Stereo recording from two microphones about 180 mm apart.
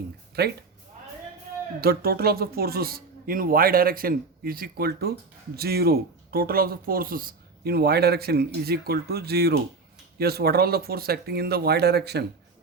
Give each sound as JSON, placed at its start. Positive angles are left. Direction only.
{"t": 0.4, "sound": "speech", "side_deg": -60}
{"t": 1.8, "sound": "speech", "side_deg": -55}